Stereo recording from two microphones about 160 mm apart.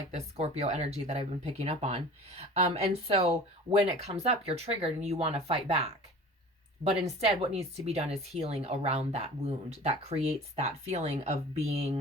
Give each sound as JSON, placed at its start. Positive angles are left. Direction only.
{"t": 0.1, "sound": "speech", "side_deg": -40}
{"t": 7.0, "sound": "speech", "side_deg": -40}